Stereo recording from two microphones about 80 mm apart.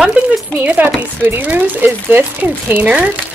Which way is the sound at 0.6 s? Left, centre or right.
Right.